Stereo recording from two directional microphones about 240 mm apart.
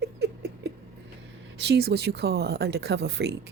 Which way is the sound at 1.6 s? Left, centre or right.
Right.